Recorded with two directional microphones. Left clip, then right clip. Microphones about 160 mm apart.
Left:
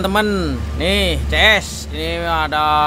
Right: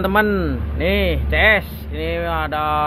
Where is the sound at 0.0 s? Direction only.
20° left (ahead or behind).